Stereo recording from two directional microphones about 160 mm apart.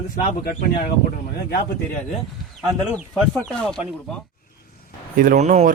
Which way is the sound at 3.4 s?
5° left (ahead or behind).